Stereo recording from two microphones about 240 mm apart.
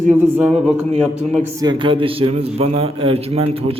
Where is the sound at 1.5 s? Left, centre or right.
Centre.